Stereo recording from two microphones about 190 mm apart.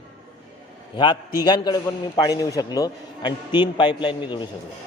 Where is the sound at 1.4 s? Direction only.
20° left (ahead or behind).